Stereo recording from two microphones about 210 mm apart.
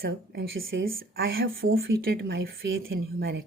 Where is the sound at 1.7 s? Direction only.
45° right (ahead or behind).